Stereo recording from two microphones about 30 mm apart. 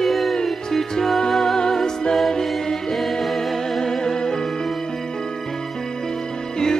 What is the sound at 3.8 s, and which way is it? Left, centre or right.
Music, centre.